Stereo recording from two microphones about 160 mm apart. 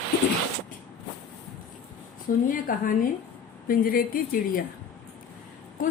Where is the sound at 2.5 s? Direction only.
60° left (ahead or behind).